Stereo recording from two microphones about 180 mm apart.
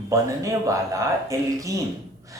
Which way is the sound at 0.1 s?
15° right (ahead or behind).